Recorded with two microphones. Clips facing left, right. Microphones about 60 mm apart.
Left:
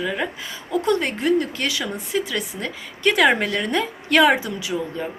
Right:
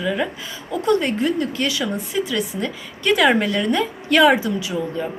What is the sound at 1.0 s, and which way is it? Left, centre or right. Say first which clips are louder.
A woman's voice: even; left.